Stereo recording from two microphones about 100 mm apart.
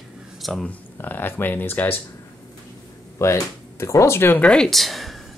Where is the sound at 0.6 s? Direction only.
20° left (ahead or behind).